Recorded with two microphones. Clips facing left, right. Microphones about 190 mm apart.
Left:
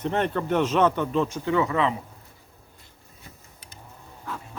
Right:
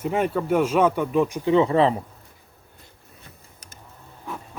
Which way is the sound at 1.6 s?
35° right (ahead or behind).